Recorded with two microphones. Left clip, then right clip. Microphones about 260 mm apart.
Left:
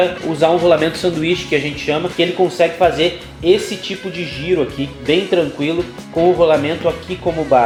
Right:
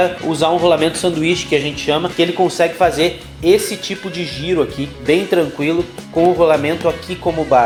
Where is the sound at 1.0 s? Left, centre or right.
Right.